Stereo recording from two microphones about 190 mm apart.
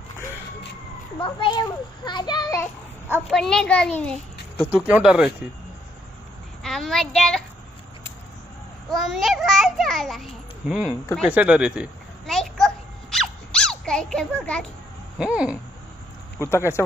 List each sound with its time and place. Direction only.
1.2 s a child's voice: 25° left (ahead or behind)
3.1 s a child's voice: centre (ahead or behind)
4.6 s a child's voice: 10° right (ahead or behind)
6.6 s a child's voice: centre (ahead or behind)
8.9 s a child's voice: centre (ahead or behind)
11.2 s a sound: 5° right (ahead or behind)
16.3 s speech: 15° left (ahead or behind)